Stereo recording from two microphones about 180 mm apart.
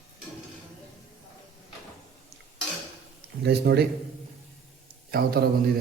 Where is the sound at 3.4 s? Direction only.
65° right (ahead or behind).